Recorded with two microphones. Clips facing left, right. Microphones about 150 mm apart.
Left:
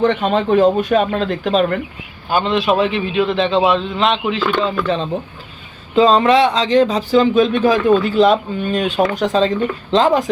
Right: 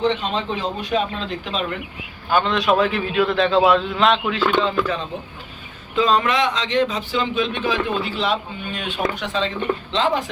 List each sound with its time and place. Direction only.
0.0 s a man's voice: 55° left (ahead or behind)
2.3 s speech: 25° left (ahead or behind)
2.7 s a man's voice: centre (ahead or behind)
5.9 s a man's voice: 30° left (ahead or behind)